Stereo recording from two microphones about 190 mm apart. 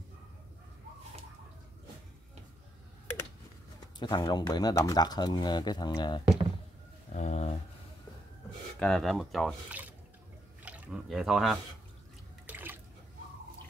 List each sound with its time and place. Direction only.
3.8 s speech: 20° left (ahead or behind)
7.2 s speech: 40° left (ahead or behind)
8.7 s speech: 5° left (ahead or behind)
10.6 s drip: 5° right (ahead or behind)
12.4 s water: 10° right (ahead or behind)